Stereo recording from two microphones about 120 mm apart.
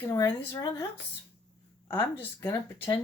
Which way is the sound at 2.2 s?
20° left (ahead or behind).